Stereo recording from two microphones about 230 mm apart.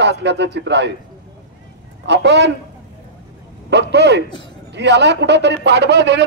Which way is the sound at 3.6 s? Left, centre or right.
Right.